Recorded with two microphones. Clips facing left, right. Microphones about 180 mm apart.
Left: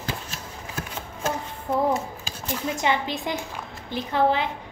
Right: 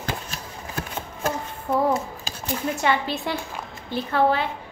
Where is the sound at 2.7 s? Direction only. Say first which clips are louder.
Right 1 dB; 15° left (ahead or behind).